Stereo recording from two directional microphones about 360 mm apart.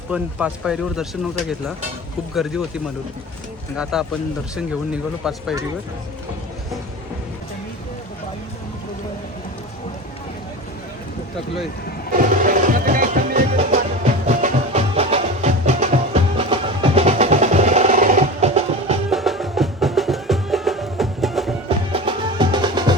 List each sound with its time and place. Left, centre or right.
0.1 s speech: centre
2.3 s speech: centre
12.1 s music: right
19.1 s music: centre
21.9 s music: centre